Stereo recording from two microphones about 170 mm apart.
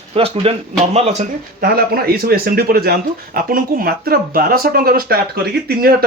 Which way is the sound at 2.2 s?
60° right (ahead or behind).